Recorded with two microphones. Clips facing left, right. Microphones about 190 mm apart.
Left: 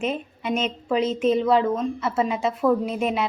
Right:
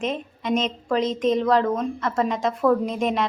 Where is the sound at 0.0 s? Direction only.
10° left (ahead or behind).